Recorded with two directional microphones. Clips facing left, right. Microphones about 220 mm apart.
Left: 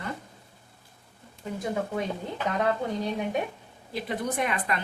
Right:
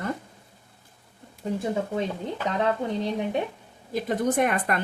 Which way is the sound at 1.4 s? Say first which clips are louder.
Right 6 dB; 35° right (ahead or behind).